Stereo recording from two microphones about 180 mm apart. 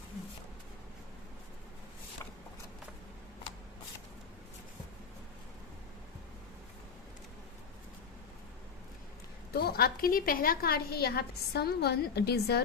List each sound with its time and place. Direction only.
9.5 s a woman's voice: 60° left (ahead or behind)